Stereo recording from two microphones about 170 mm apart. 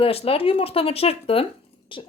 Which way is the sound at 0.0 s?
35° left (ahead or behind).